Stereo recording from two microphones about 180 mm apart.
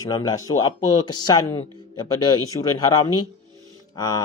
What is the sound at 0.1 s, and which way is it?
Speech, 20° left (ahead or behind).